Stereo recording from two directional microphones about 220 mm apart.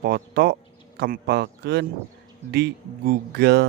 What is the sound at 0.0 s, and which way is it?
A man's voice, 45° right (ahead or behind).